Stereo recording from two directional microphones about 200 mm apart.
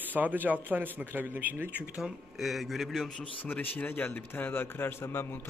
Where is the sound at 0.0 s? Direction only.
10° right (ahead or behind).